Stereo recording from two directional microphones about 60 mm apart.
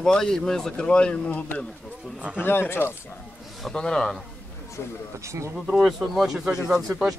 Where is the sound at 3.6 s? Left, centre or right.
Centre.